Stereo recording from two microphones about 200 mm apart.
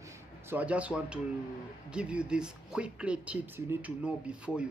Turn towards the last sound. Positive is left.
turn(degrees=-5)  # may be behind; listen again after turning